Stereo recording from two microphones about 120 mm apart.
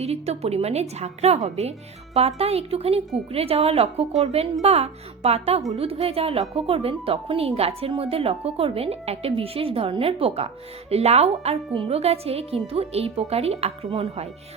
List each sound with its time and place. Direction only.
0.0 s a woman's voice: 60° right (ahead or behind)
11.7 s a woman's voice: 50° right (ahead or behind)